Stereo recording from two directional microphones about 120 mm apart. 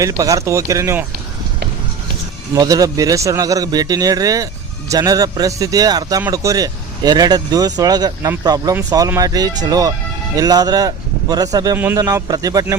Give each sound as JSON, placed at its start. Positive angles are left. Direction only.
{"t": 0.0, "sound": "speech", "side_deg": -30}
{"t": 2.6, "sound": "speech", "side_deg": -30}